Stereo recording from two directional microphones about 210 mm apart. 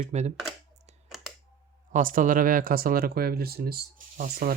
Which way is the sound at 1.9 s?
40° right (ahead or behind).